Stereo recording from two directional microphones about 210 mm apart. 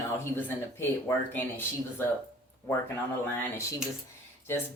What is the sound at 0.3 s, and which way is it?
Speech, 10° left (ahead or behind).